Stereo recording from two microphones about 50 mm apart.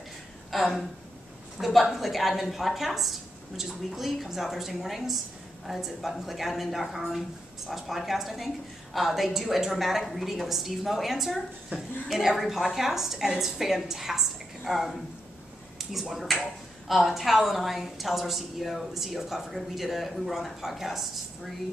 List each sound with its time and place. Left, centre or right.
0.5 s a woman's voice: centre
11.7 s a woman's voice: right
12.1 s a woman's voice: centre